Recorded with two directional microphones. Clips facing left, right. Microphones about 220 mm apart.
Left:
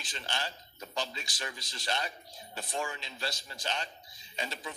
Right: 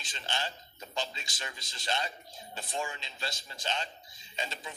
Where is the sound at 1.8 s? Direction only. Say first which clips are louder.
Right 1 dB; 25° right (ahead or behind).